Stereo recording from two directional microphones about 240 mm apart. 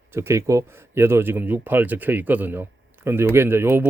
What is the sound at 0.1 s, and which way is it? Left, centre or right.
Speech, centre.